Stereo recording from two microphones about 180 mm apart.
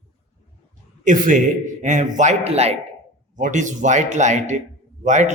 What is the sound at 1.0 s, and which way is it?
A man's voice, 45° right (ahead or behind).